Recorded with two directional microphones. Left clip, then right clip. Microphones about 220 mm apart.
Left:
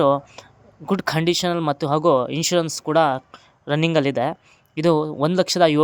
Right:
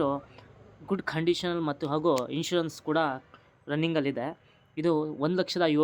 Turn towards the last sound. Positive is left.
turn(degrees=40)  # may be behind; listen again after turning